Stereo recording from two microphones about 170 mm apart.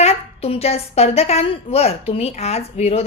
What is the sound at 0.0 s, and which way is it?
A woman's voice, 35° left (ahead or behind).